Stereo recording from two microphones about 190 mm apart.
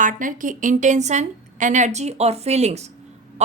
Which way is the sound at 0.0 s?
45° right (ahead or behind).